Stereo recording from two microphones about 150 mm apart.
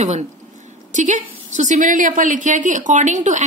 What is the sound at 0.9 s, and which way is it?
A woman's voice, 55° right (ahead or behind).